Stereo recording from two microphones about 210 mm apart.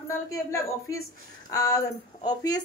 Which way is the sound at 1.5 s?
15° left (ahead or behind).